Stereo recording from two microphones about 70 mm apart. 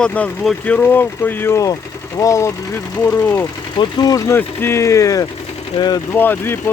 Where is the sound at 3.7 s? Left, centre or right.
Left.